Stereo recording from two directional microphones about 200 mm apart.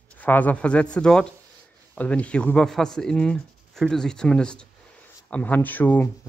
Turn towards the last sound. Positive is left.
turn(degrees=10)  # may be behind; listen again after turning